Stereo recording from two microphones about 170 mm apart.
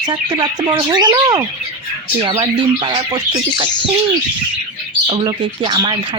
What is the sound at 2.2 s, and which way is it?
Speech, 35° right (ahead or behind).